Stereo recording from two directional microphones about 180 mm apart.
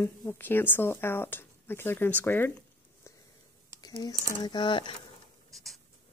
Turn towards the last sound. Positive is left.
turn(degrees=0)  # may be behind; listen again after turning